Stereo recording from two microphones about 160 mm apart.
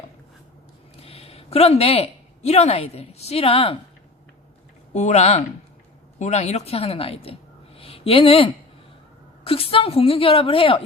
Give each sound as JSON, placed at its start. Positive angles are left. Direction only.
{"t": 0.9, "sound": "speech", "side_deg": 35}
{"t": 4.9, "sound": "a woman's voice", "side_deg": 45}